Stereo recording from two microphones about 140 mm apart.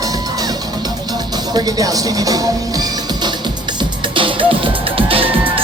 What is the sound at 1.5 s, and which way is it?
Speech, 25° right (ahead or behind).